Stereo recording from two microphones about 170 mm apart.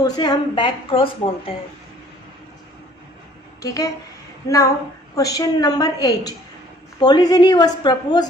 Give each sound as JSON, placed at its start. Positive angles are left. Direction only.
{"t": 0.0, "sound": "a woman's voice", "side_deg": 25}
{"t": 3.6, "sound": "a woman's voice", "side_deg": 20}